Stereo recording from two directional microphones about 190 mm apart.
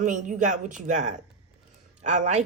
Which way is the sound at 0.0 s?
45° right (ahead or behind).